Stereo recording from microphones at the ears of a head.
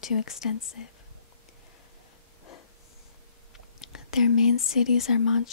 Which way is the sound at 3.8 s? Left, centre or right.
Left.